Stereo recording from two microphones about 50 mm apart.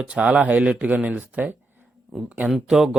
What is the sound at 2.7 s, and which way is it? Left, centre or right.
Speech, centre.